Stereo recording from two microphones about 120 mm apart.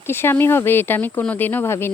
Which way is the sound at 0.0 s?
20° left (ahead or behind).